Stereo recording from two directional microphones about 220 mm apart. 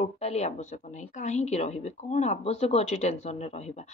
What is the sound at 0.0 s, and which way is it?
A woman's voice, 30° left (ahead or behind).